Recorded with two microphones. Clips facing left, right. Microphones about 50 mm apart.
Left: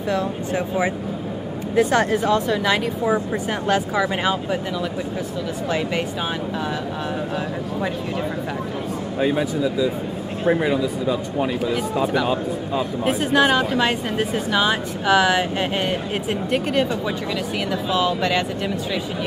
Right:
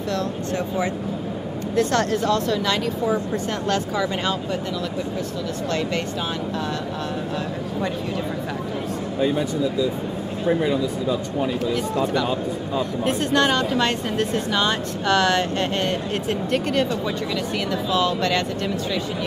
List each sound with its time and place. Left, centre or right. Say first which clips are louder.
0.1 s speech: left 3 dB; centre
5.7 s speech: left 2 dB; centre
10.4 s speech: left 2 dB; left